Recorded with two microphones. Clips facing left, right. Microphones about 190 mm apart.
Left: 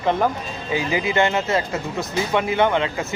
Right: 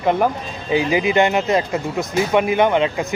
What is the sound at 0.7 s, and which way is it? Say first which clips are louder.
Speech: right 5 dB; 20° right (ahead or behind).